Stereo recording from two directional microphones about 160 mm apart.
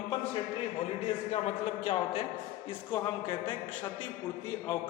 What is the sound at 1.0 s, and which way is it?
A man's voice, 40° left (ahead or behind).